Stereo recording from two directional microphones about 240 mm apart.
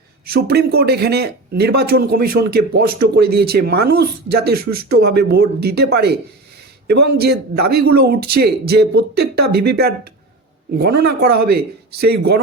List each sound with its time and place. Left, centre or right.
0.3 s speech: right